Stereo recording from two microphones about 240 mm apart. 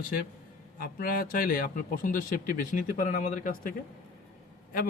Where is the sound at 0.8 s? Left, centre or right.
Left.